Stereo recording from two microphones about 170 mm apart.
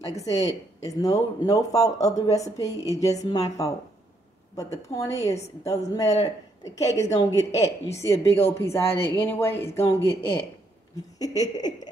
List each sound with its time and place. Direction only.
0.0 s speech: 20° left (ahead or behind)
11.5 s speech: 25° left (ahead or behind)